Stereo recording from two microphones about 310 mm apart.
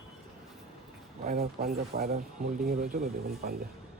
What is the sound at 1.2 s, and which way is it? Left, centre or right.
Speech, right.